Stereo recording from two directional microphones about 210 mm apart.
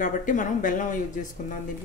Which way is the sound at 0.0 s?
40° left (ahead or behind).